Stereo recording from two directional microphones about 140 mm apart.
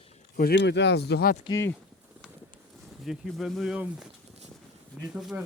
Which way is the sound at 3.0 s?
Centre (ahead or behind).